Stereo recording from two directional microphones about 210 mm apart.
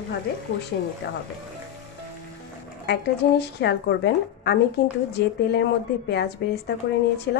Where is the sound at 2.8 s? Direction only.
50° left (ahead or behind).